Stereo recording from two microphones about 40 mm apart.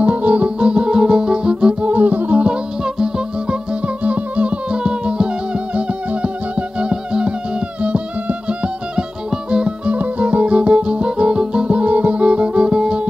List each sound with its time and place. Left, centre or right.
0.0 s music: right
1.9 s music: right
2.4 s music: right
3.8 s music: right
7.8 s music: right
9.8 s music: right; by 13.0 s centre